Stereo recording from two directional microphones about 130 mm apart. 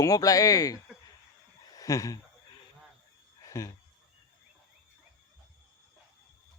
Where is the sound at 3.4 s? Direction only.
25° left (ahead or behind).